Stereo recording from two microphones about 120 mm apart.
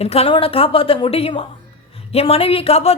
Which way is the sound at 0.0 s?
55° left (ahead or behind).